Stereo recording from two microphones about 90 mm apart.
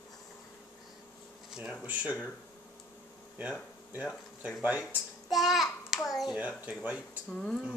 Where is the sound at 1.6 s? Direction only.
15° right (ahead or behind).